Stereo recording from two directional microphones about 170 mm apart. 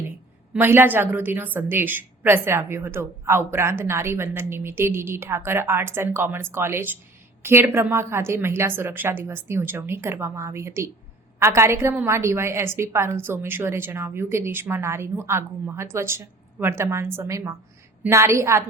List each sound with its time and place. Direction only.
0.5 s a woman's voice: 15° right (ahead or behind)